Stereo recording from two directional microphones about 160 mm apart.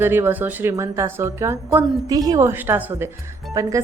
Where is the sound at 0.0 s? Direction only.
15° right (ahead or behind).